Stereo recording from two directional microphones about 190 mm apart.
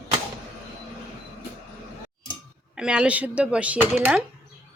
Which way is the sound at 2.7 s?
5° right (ahead or behind).